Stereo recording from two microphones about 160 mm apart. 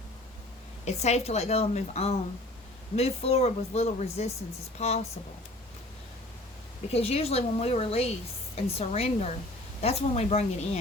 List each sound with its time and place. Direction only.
0.9 s a woman's voice: 45° left (ahead or behind)
6.9 s speech: 40° left (ahead or behind)